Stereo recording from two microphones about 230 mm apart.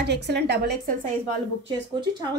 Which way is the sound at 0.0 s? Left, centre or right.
Right.